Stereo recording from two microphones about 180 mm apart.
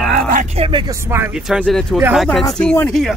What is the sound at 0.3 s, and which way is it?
Speech, 40° right (ahead or behind).